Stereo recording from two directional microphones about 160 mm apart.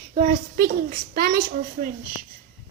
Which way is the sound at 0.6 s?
70° right (ahead or behind).